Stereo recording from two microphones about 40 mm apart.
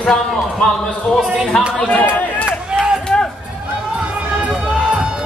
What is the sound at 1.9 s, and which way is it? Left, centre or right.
Speech, left.